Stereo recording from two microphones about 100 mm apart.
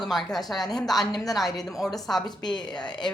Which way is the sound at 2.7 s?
45° left (ahead or behind).